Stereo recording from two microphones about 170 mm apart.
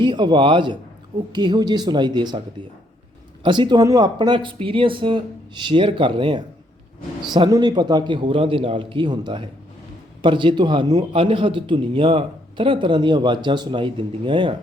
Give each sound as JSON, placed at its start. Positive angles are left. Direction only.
{"t": 0.0, "sound": "a man's voice", "side_deg": -25}
{"t": 3.4, "sound": "a man's voice", "side_deg": -25}